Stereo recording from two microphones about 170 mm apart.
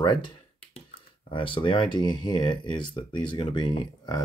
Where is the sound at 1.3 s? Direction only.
30° left (ahead or behind).